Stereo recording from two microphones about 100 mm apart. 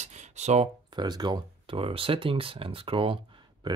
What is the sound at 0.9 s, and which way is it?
Speech, 45° right (ahead or behind).